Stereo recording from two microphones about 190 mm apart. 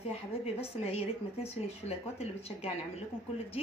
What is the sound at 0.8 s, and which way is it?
A woman's voice, 30° left (ahead or behind).